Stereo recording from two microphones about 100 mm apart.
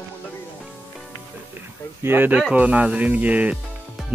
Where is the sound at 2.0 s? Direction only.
20° right (ahead or behind).